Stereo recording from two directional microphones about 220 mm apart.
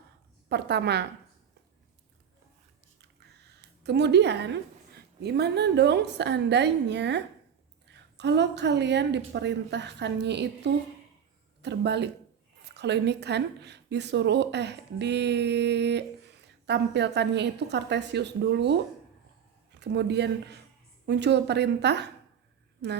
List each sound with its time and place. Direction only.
0.4 s a woman's voice: 50° right (ahead or behind)
3.0 s a sound: 50° right (ahead or behind)
5.2 s a woman's voice: 50° right (ahead or behind)
19.8 s a woman's voice: 50° right (ahead or behind)